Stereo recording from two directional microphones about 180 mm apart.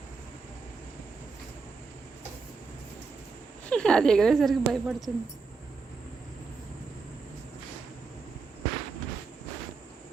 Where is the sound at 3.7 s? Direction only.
5° left (ahead or behind).